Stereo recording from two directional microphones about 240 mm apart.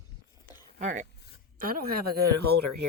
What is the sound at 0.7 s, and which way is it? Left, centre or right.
Speech, right.